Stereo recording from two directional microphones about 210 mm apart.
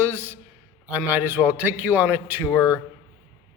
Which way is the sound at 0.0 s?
10° right (ahead or behind).